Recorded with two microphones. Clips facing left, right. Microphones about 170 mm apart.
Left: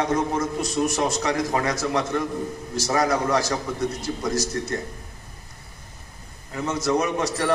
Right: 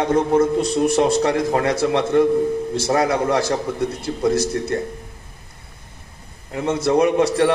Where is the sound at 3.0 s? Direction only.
30° right (ahead or behind).